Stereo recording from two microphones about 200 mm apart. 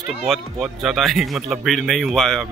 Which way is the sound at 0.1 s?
Centre (ahead or behind).